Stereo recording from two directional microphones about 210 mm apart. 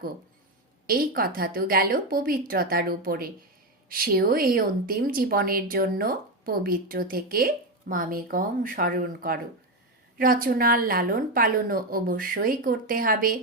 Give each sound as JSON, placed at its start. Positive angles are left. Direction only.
{"t": 0.9, "sound": "speech", "side_deg": -45}